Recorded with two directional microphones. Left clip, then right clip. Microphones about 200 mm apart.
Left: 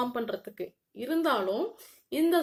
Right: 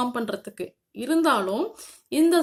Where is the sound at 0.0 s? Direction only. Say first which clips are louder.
Right 4 dB; 35° right (ahead or behind).